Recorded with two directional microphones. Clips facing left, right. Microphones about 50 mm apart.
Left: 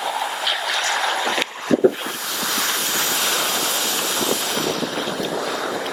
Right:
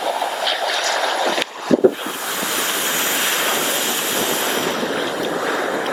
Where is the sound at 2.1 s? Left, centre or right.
Right.